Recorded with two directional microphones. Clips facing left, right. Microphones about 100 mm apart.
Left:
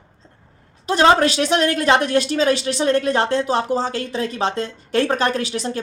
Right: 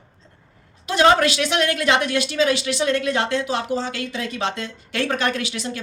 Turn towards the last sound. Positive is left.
turn(degrees=40)  # may be behind; listen again after turning